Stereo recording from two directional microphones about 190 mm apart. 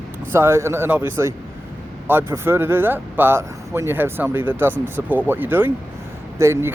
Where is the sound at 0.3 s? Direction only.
15° right (ahead or behind).